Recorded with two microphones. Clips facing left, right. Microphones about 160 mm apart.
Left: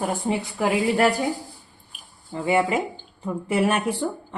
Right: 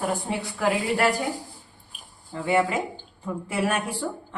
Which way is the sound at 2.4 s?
15° left (ahead or behind).